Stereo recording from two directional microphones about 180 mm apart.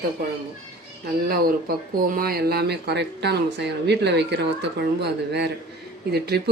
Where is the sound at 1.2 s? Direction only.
55° right (ahead or behind).